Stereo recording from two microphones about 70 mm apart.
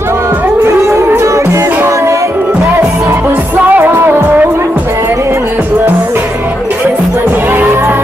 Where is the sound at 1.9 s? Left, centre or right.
Right.